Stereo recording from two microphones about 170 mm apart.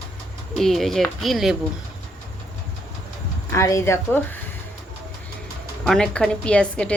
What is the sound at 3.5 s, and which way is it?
Speech, 20° left (ahead or behind).